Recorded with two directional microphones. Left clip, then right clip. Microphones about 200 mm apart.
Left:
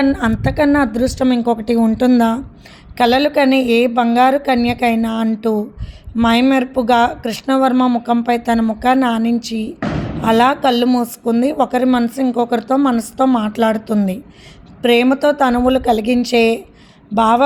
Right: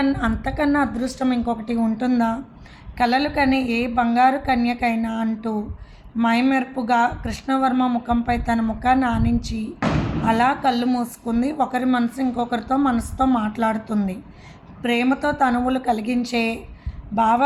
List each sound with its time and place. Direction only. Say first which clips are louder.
0.0 s a woman's voice: left 6 dB; 40° left (ahead or behind)